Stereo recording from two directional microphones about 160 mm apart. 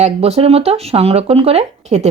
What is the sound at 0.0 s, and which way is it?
Speech, 40° right (ahead or behind).